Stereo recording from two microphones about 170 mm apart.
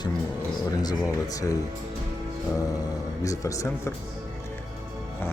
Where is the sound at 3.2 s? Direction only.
20° left (ahead or behind).